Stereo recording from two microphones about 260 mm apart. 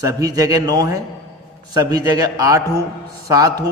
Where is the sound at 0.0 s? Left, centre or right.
Centre.